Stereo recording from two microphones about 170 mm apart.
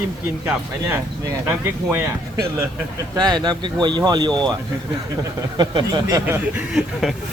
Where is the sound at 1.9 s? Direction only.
15° right (ahead or behind).